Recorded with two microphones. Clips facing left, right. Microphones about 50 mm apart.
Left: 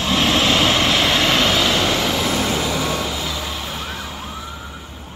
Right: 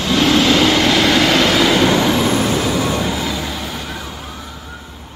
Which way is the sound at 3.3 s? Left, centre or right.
Centre.